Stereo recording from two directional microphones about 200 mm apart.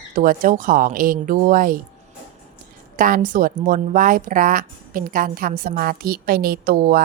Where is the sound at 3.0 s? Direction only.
45° right (ahead or behind).